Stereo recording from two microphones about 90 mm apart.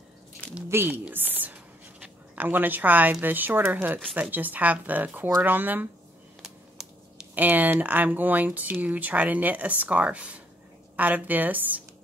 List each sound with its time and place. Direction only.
0.7 s speech: 25° right (ahead or behind)
1.0 s writing: 20° right (ahead or behind)
3.7 s speech: 20° right (ahead or behind)
7.3 s speech: 20° right (ahead or behind)